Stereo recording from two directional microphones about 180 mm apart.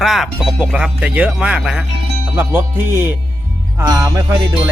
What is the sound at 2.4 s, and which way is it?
Music, 10° right (ahead or behind).